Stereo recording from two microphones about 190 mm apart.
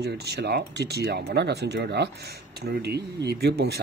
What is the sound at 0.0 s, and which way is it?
Speech, 60° right (ahead or behind).